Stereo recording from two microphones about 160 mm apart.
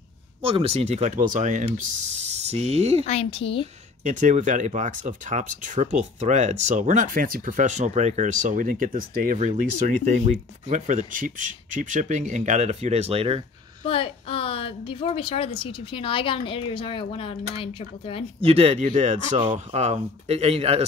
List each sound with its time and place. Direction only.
0.4 s speech: 35° right (ahead or behind)
3.1 s a woman's voice: 35° left (ahead or behind)
4.0 s speech: 50° right (ahead or behind)
13.8 s a woman's voice: 35° left (ahead or behind)
18.4 s speech: 40° right (ahead or behind)